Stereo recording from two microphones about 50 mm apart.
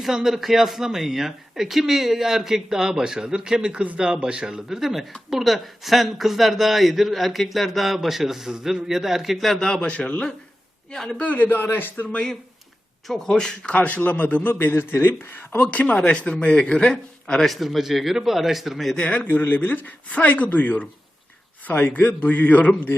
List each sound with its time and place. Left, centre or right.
0.0 s a man's voice: centre
9.5 s speech: centre
9.8 s speech: left
10.9 s speech: centre
11.3 s a man's voice: left
13.1 s speech: centre
13.7 s a man's voice: left
14.5 s speech: left
15.5 s a man's voice: left
17.4 s a man's voice: centre
18.9 s speech: left
19.3 s a man's voice: left